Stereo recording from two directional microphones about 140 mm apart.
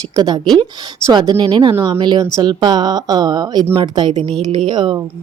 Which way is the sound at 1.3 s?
35° right (ahead or behind).